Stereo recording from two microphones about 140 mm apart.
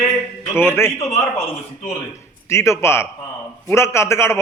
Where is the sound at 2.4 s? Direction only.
20° left (ahead or behind).